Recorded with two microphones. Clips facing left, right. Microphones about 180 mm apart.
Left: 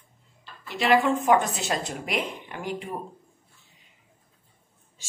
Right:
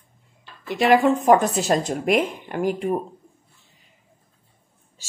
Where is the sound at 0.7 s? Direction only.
45° right (ahead or behind).